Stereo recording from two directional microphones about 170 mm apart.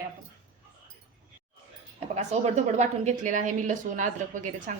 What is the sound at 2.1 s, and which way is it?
A woman's voice, 40° right (ahead or behind).